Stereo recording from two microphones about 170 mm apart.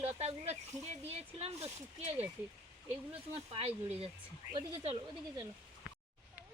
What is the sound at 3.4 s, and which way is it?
Speech, 35° right (ahead or behind).